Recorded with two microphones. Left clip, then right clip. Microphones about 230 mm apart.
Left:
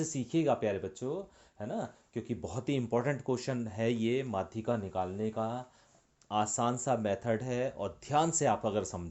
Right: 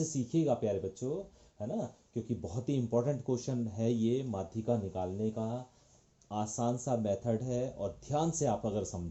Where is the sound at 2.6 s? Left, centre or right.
Left.